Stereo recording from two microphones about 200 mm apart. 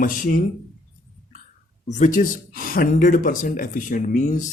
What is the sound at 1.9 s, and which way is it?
Speech, 40° left (ahead or behind).